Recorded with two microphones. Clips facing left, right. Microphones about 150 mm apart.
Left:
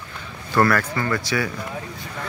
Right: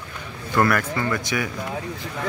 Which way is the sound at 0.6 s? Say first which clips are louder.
Left 1 dB; 15° right (ahead or behind).